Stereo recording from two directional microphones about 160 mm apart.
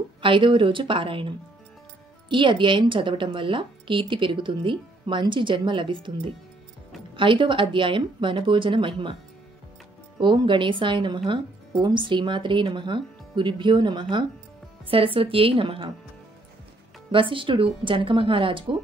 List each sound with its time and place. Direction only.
0.2 s a woman's voice: 30° right (ahead or behind)
10.2 s a woman's voice: 30° right (ahead or behind)
17.1 s a woman's voice: 30° right (ahead or behind)